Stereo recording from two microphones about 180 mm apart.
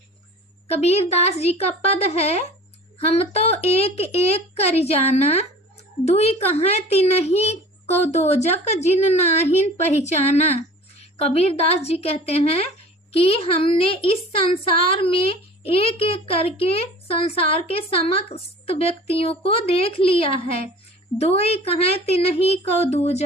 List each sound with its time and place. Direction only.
0.7 s a woman's voice: 35° left (ahead or behind)